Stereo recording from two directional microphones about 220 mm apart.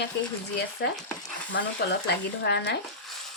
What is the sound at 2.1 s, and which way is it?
Speech, 50° left (ahead or behind).